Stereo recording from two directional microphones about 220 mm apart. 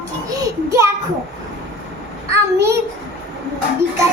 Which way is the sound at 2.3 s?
15° right (ahead or behind).